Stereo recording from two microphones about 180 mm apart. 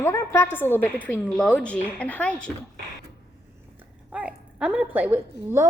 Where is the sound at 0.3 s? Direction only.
10° left (ahead or behind).